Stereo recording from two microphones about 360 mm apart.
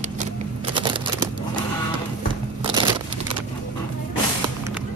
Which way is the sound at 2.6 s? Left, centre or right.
Centre.